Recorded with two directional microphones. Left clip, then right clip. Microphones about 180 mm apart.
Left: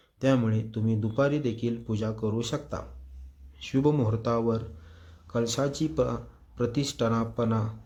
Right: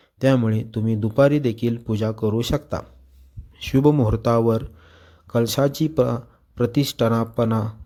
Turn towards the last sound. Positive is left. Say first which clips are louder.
# right 7 dB
turn(degrees=-40)  # may be behind; listen again after turning